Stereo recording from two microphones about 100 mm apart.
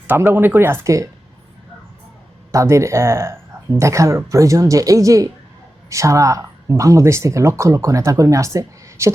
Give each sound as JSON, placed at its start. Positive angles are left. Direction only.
{"t": 0.1, "sound": "speech", "side_deg": -25}
{"t": 2.5, "sound": "speech", "side_deg": -30}